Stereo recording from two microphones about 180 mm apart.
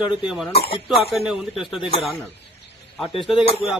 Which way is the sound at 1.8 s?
30° left (ahead or behind).